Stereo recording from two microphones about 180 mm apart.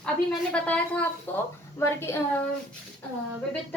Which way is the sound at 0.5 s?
10° left (ahead or behind).